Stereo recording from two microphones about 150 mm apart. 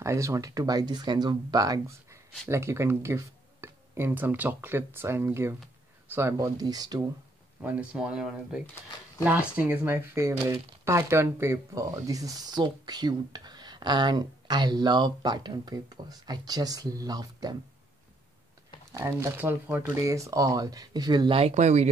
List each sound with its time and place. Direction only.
0.0 s speech: 20° right (ahead or behind)
7.6 s speech: 10° right (ahead or behind); by 17.6 s 25° right (ahead or behind)
18.9 s speech: 20° right (ahead or behind); by 21.8 s 50° right (ahead or behind)